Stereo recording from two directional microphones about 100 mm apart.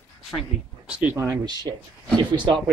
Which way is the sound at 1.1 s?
25° right (ahead or behind).